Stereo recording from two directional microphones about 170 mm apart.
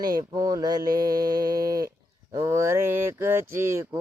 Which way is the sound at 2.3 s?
20° right (ahead or behind).